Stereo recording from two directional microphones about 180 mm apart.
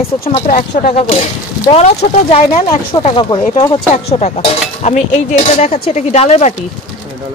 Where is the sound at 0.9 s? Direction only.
35° left (ahead or behind).